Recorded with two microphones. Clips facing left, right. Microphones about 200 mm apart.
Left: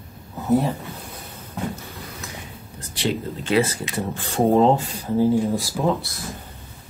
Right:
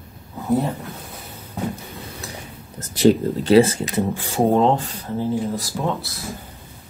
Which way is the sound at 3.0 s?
40° right (ahead or behind).